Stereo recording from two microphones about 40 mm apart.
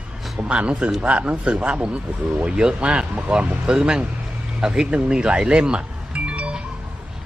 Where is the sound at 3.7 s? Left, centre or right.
Centre.